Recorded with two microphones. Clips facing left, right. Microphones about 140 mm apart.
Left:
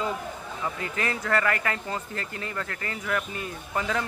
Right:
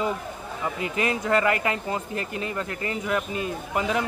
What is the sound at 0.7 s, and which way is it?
Speech, 15° right (ahead or behind).